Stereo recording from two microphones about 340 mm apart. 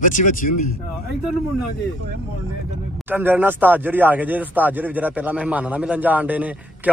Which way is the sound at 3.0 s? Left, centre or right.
Centre.